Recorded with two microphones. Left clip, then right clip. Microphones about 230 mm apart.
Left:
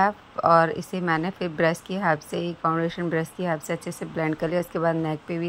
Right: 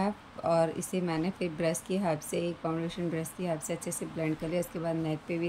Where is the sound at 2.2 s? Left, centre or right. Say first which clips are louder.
Left 3 dB; centre.